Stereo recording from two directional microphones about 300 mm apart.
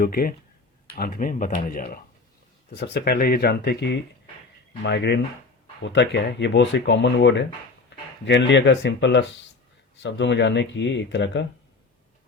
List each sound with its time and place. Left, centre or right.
0.0 s speech: left